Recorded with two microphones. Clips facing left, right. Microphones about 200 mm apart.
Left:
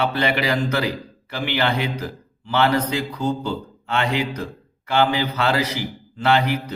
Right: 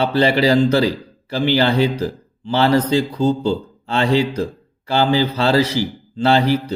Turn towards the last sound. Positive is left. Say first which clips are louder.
# right 4 dB
turn(degrees=-30)  # may be behind; listen again after turning